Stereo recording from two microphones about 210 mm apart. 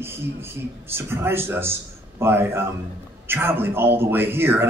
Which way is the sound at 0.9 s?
10° right (ahead or behind).